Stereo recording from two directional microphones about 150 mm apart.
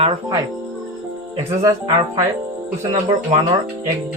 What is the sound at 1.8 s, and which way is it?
Speech, 25° right (ahead or behind).